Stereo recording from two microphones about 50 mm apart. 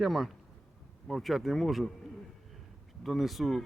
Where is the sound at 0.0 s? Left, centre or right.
Centre.